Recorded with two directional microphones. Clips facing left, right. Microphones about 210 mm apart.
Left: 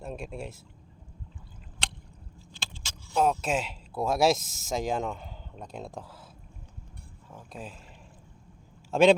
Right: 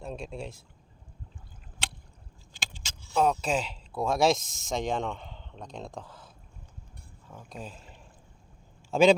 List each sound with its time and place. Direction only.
0.0 s speech: 5° left (ahead or behind)
2.5 s keys jangling: 15° right (ahead or behind)
3.1 s speech: centre (ahead or behind)
7.3 s speech: centre (ahead or behind)
8.9 s a man's voice: centre (ahead or behind)